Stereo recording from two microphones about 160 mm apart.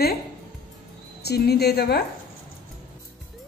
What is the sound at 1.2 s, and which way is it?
Speech, 90° left.